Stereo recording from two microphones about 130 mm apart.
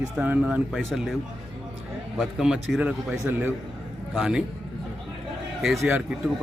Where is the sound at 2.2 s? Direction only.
5° right (ahead or behind).